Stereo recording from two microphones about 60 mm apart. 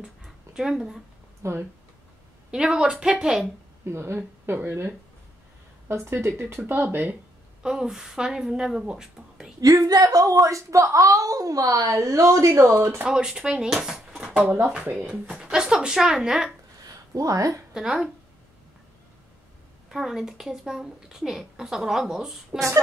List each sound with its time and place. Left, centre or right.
0.6 s a woman's voice: centre
1.4 s speech: right
2.5 s a woman's voice: centre
3.8 s speech: right
7.6 s a woman's voice: centre
9.6 s speech: right
10.4 s a woman's voice: right
13.1 s a woman's voice: centre
14.3 s a woman's voice: right
16.8 s a sound: right
17.7 s a woman's voice: centre
19.9 s a woman's voice: centre